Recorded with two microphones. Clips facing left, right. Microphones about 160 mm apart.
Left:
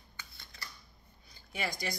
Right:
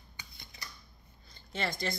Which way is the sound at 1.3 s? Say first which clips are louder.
Right 2 dB; 10° left (ahead or behind).